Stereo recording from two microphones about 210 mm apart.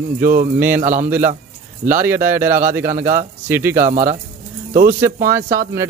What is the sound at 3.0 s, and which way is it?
Speech, 35° right (ahead or behind).